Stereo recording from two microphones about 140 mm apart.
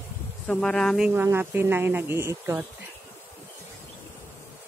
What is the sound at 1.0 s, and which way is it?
Speech, 15° right (ahead or behind).